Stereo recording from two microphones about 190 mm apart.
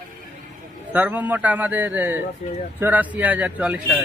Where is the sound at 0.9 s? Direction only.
10° right (ahead or behind).